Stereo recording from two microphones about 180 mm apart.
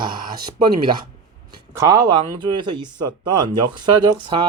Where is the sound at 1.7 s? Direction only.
20° right (ahead or behind).